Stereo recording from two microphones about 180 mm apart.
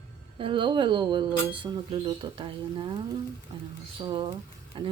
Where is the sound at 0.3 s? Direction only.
30° right (ahead or behind).